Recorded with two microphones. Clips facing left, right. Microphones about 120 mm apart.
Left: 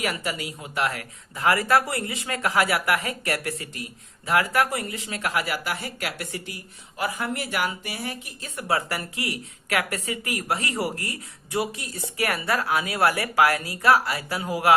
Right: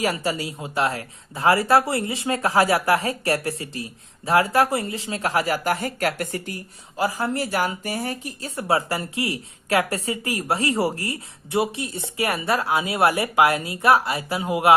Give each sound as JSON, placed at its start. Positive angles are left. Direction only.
{"t": 0.0, "sound": "speech", "side_deg": -30}
{"t": 6.9, "sound": "speech", "side_deg": -30}